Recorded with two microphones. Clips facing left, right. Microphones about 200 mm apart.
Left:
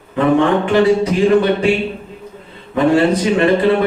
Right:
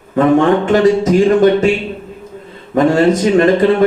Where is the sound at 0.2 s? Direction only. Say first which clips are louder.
Right 3 dB; 45° right (ahead or behind).